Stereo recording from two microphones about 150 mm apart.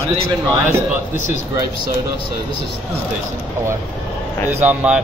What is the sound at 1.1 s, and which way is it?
Speech, 55° left (ahead or behind).